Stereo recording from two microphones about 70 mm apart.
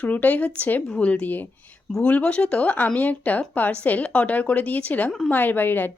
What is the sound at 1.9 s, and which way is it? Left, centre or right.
A woman's voice, centre.